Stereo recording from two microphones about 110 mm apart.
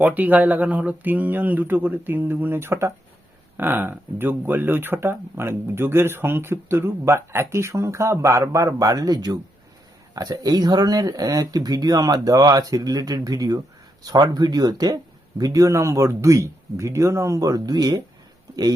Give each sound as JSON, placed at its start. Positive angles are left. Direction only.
{"t": 0.0, "sound": "speech", "side_deg": -15}